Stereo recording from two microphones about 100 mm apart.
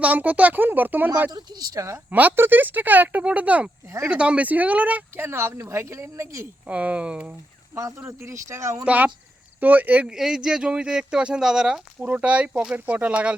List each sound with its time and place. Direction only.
0.0 s speech: 15° right (ahead or behind)
1.3 s speech: 40° right (ahead or behind)
2.0 s speech: 15° right (ahead or behind)
3.8 s speech: 25° right (ahead or behind)
4.1 s speech: 10° right (ahead or behind); by 6.5 s 30° right (ahead or behind)
6.7 s speech: 15° right (ahead or behind)
7.8 s speech: 30° right (ahead or behind)
8.8 s speech: 15° right (ahead or behind)